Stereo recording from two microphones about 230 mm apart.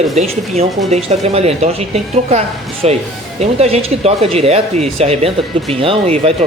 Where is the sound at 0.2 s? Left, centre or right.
Right.